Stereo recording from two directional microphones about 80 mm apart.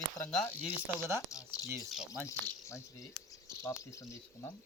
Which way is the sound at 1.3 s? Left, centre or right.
Left.